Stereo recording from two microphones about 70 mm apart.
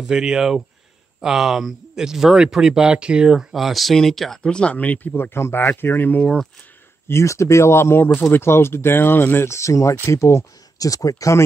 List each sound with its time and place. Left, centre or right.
0.0 s speech: centre; by 5.1 s left
5.1 s speech: left
7.1 s speech: left
10.8 s speech: left